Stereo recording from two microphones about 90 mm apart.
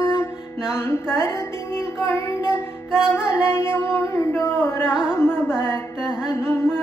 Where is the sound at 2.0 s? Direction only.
30° left (ahead or behind).